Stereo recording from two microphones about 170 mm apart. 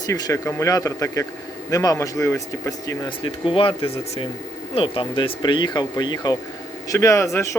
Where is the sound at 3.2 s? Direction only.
30° left (ahead or behind).